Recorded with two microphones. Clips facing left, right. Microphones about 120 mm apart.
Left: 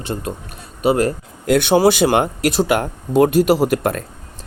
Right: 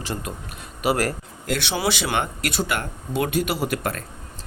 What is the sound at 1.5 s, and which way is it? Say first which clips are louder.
Speech: left 11 dB; 50° left (ahead or behind).